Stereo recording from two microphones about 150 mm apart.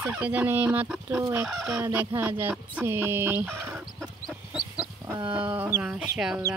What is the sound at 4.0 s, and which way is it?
Chicken, centre (ahead or behind).